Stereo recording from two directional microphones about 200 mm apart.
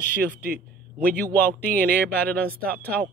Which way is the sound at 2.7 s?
50° right (ahead or behind).